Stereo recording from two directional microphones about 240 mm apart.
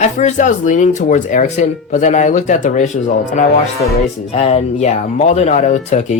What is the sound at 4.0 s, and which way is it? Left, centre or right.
Speech, left.